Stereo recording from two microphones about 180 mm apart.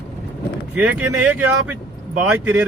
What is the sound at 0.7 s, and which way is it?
Speech, 10° right (ahead or behind).